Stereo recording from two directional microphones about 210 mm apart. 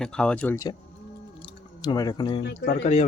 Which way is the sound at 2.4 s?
50° left (ahead or behind).